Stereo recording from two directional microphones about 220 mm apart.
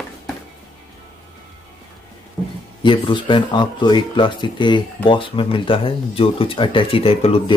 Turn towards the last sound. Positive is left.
turn(degrees=25)  # may be behind; listen again after turning